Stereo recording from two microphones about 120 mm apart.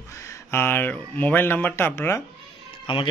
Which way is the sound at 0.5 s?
20° left (ahead or behind).